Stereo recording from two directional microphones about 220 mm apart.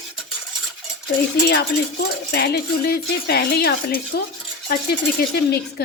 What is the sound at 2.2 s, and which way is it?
Speech, 45° left (ahead or behind).